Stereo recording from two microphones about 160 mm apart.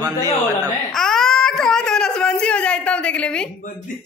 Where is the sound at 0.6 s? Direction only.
Centre (ahead or behind).